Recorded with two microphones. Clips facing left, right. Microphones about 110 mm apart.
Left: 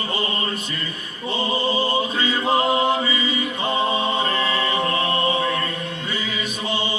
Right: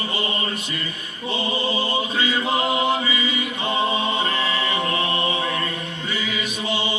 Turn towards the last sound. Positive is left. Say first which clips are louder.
# left 2 dB
turn(degrees=40)  # may be behind; listen again after turning